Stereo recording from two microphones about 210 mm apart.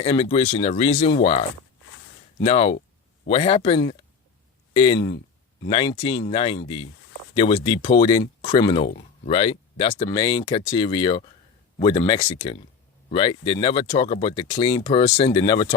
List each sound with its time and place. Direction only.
0.0 s speech: 25° left (ahead or behind)